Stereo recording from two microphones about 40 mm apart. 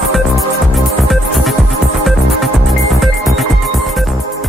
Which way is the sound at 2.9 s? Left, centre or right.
Centre.